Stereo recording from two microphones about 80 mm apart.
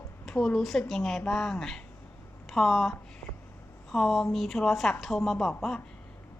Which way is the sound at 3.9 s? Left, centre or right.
Centre.